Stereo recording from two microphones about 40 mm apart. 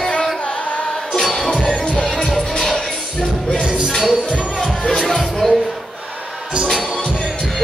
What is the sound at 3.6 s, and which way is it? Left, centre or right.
Music, right.